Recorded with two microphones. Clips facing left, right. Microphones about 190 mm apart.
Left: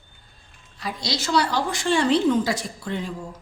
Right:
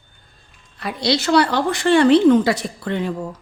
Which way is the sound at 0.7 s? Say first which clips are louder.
Right 8 dB; 65° right (ahead or behind).